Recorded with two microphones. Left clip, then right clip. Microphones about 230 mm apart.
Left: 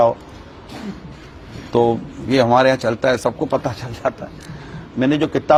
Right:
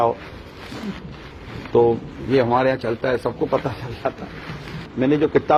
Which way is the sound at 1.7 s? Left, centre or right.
Left.